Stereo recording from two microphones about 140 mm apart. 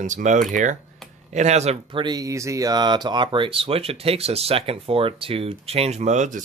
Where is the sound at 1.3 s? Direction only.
55° right (ahead or behind).